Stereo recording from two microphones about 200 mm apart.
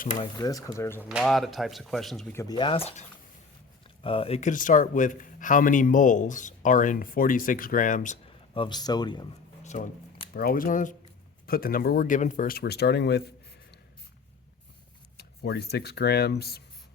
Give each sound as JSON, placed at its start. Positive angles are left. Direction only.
{"t": 0.2, "sound": "speech", "side_deg": 20}
{"t": 1.0, "sound": "speech", "side_deg": 0}
{"t": 2.3, "sound": "speech", "side_deg": 15}
{"t": 8.5, "sound": "speech", "side_deg": 25}
{"t": 9.6, "sound": "speech", "side_deg": 40}
{"t": 15.2, "sound": "speech", "side_deg": 55}